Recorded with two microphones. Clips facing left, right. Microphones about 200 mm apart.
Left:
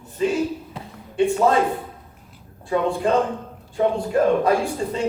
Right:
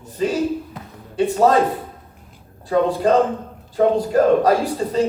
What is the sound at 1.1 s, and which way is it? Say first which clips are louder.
Speech: right 2 dB; 40° right (ahead or behind).